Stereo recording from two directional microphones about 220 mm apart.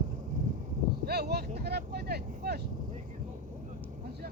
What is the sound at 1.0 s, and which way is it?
Vehicle, 45° right (ahead or behind).